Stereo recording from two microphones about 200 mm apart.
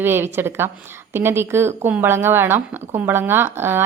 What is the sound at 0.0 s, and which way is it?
A woman's voice, 10° right (ahead or behind).